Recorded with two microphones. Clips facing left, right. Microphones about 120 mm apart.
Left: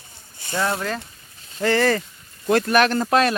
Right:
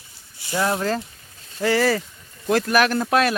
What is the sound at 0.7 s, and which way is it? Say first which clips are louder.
Speech: right 4 dB; 30° right (ahead or behind).